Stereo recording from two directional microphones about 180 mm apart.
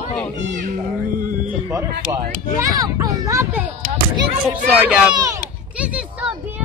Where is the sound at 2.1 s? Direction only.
20° right (ahead or behind).